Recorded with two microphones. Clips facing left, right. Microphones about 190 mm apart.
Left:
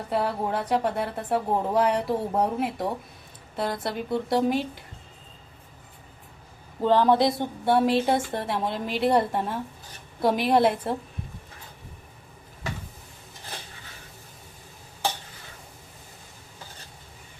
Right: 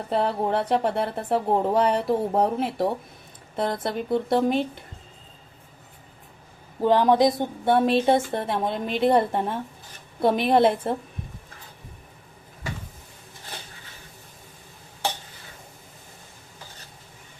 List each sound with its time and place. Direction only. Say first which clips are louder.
0.1 s speech: right 3 dB; 30° right (ahead or behind)
6.8 s speech: right 2 dB; 15° right (ahead or behind)